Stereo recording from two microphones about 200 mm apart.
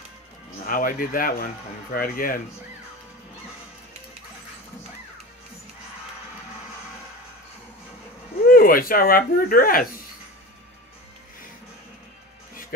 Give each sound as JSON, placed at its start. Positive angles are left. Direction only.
{"t": 0.7, "sound": "speech", "side_deg": 45}
{"t": 8.5, "sound": "speech", "side_deg": 45}